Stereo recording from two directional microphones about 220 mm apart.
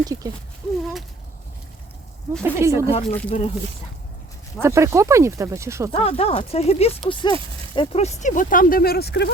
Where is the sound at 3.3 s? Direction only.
25° left (ahead or behind).